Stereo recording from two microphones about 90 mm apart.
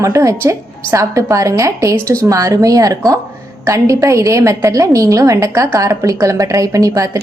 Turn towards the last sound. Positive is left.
turn(degrees=-40)  # may be behind; listen again after turning